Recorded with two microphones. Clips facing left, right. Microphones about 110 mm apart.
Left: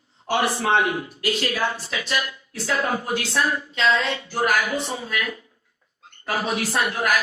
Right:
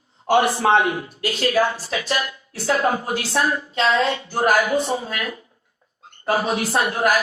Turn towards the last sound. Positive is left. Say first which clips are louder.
# right 3 dB
turn(degrees=-30)  # may be behind; listen again after turning